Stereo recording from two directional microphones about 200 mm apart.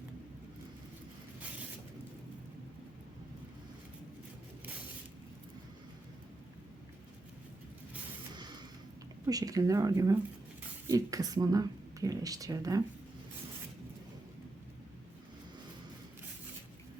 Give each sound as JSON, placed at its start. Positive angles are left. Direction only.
{"t": 9.2, "sound": "speech", "side_deg": -20}